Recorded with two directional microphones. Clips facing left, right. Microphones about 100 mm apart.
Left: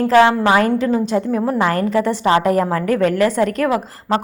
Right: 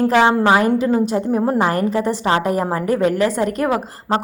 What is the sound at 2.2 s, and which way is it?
A woman's voice, 20° right (ahead or behind).